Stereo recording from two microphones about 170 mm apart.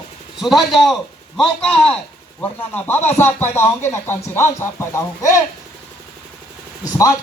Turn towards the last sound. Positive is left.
turn(degrees=20)  # may be behind; listen again after turning